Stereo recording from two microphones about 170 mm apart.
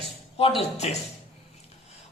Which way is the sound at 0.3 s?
35° left (ahead or behind).